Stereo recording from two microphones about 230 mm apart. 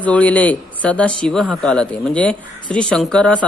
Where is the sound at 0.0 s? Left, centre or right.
Centre.